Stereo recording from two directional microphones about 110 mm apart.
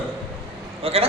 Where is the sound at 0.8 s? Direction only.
65° right (ahead or behind).